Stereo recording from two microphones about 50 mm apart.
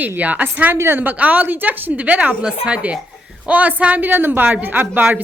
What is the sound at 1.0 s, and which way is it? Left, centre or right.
A woman's voice, right.